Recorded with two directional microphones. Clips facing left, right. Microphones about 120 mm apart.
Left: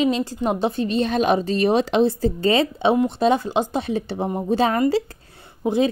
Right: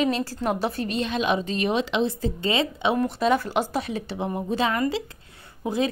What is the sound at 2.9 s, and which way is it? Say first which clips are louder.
A woman's voice: left 3 dB; 25° left (ahead or behind).